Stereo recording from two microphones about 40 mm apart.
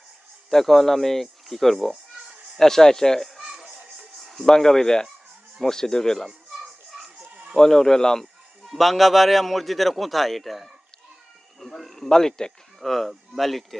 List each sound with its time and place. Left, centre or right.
0.5 s speech: centre
3.4 s music: centre
4.2 s a sound: centre
4.4 s speech: centre
7.5 s speech: centre
8.6 s a man's voice: centre
12.1 s speech: centre
12.8 s a man's voice: centre